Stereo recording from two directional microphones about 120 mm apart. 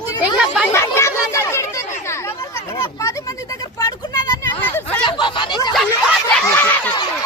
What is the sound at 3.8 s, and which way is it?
Vehicle, 30° left (ahead or behind).